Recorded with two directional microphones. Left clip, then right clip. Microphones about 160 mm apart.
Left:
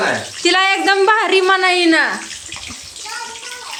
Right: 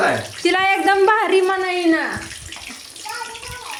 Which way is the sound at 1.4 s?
15° left (ahead or behind).